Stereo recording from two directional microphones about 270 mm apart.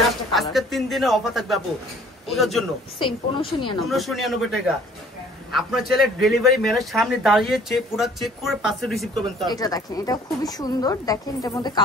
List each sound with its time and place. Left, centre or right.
0.3 s a man's voice: centre
3.0 s a woman's voice: centre
3.8 s a man's voice: centre
9.5 s a woman's voice: centre